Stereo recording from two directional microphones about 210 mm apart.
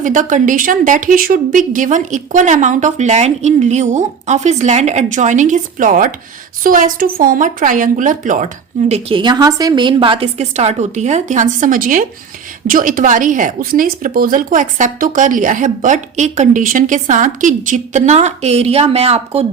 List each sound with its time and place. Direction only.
0.0 s a woman's voice: 35° right (ahead or behind)
8.9 s a woman's voice: 25° right (ahead or behind)